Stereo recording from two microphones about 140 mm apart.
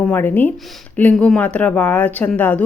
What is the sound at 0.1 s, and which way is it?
Speech, 15° left (ahead or behind).